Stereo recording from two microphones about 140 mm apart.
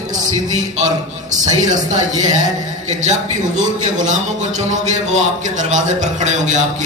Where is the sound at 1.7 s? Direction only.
60° right (ahead or behind).